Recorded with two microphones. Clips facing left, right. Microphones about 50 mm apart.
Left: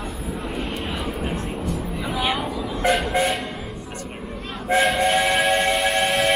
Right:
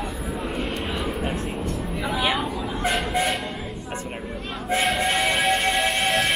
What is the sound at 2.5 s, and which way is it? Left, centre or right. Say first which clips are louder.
Train: left 1 dB; right.